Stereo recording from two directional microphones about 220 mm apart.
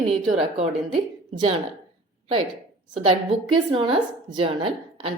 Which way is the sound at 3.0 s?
25° right (ahead or behind).